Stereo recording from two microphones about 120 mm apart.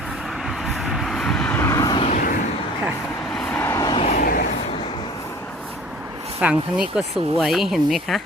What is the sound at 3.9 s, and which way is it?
Vehicle, 55° left (ahead or behind).